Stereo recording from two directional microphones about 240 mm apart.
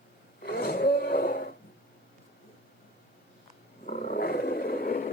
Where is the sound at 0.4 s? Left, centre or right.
Left.